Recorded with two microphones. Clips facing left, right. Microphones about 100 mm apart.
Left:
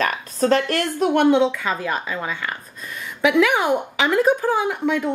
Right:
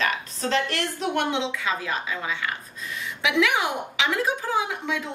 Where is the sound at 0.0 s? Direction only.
45° left (ahead or behind).